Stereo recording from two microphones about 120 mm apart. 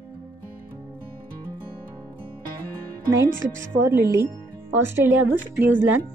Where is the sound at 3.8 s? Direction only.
25° right (ahead or behind).